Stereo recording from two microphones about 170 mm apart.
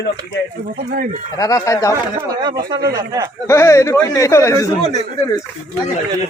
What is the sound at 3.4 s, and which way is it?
Speech, 15° left (ahead or behind).